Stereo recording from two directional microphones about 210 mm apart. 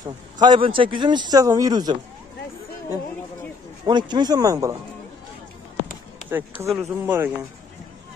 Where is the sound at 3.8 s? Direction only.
20° right (ahead or behind).